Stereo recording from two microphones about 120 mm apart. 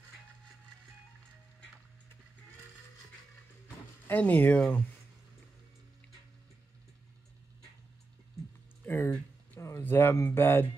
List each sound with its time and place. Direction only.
4.1 s speech: 15° left (ahead or behind)
8.8 s a sound: 20° left (ahead or behind)
9.6 s speech: 20° left (ahead or behind)